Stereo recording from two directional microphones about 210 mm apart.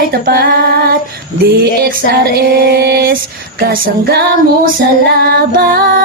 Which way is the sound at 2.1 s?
50° right (ahead or behind).